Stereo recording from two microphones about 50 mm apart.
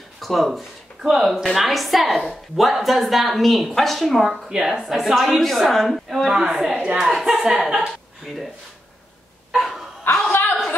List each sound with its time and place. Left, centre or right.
0.2 s a woman's voice: centre
4.3 s a woman's voice: centre
5.1 s a woman's voice: centre
6.7 s a woman's voice: right
7.1 s a woman's voice: centre
9.5 s dog: centre
10.1 s chuckle: left